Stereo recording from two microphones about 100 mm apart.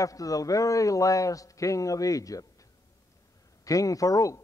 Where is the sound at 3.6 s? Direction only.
35° left (ahead or behind).